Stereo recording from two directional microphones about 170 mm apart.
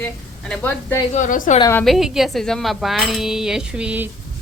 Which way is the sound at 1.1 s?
45° left (ahead or behind).